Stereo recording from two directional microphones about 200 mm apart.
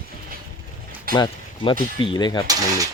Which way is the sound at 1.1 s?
25° left (ahead or behind).